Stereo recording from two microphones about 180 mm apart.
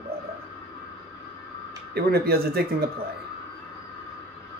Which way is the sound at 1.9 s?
60° right (ahead or behind).